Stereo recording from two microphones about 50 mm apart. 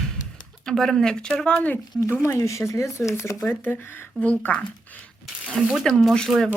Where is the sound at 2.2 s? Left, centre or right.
Left.